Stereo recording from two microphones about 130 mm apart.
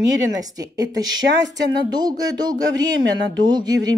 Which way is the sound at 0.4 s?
30° right (ahead or behind).